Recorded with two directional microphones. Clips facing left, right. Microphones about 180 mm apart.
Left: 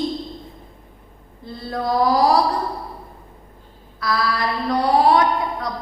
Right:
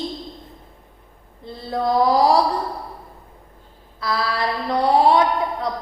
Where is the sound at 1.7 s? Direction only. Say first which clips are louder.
Right 1 dB; 25° right (ahead or behind).